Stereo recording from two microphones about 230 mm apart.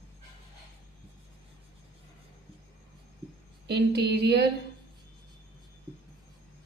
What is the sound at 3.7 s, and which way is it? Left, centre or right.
Speech, right.